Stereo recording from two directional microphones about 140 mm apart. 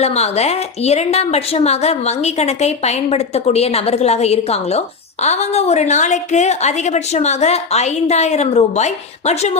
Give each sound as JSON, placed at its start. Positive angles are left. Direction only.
{"t": 0.0, "sound": "a woman's voice", "side_deg": 50}